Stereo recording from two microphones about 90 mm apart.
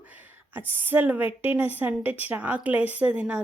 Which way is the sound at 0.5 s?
20° right (ahead or behind).